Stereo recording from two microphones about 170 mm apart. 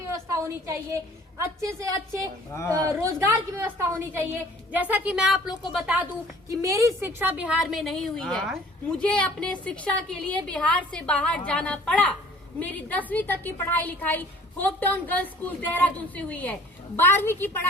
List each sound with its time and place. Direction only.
0.4 s a woman's voice: 15° right (ahead or behind)
2.5 s a woman's voice: 15° left (ahead or behind)
2.8 s a woman's voice: 15° right (ahead or behind)
6.5 s a woman's voice: 20° right (ahead or behind); by 17.7 s 15° left (ahead or behind)